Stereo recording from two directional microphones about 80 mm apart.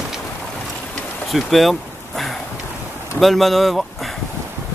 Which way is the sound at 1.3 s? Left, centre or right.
Centre.